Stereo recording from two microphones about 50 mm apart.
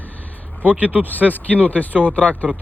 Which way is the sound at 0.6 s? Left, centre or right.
Right.